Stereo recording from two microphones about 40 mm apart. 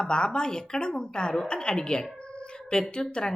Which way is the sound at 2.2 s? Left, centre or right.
Left.